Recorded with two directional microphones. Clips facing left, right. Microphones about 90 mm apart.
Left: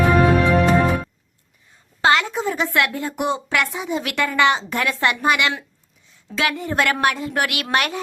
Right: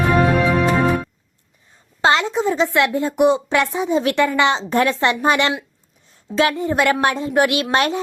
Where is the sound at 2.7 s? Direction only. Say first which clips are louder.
Right 5 dB; 20° right (ahead or behind).